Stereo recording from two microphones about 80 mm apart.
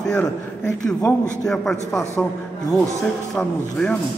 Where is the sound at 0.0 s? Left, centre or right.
Centre.